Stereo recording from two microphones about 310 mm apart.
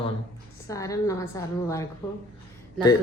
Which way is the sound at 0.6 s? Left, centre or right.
Centre.